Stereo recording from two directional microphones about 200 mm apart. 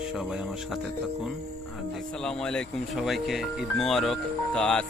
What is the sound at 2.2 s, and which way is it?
Speech, 5° left (ahead or behind).